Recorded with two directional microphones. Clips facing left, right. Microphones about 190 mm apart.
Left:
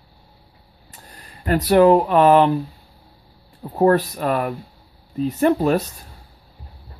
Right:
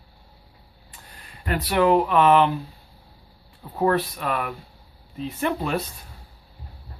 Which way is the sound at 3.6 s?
40° left (ahead or behind).